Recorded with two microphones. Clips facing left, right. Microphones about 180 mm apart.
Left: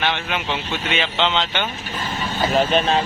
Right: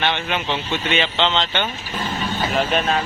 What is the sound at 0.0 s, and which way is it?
Speech, centre (ahead or behind).